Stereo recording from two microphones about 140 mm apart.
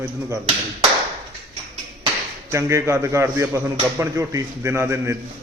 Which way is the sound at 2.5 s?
20° right (ahead or behind).